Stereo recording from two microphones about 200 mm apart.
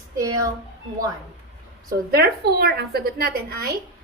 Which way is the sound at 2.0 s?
50° right (ahead or behind).